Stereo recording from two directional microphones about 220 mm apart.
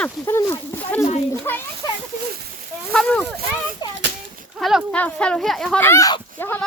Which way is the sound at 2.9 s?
5° left (ahead or behind).